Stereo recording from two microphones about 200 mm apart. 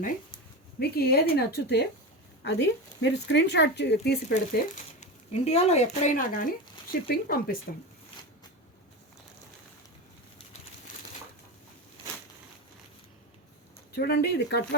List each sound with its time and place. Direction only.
0.8 s speech: 50° left (ahead or behind)
13.9 s speech: 55° left (ahead or behind)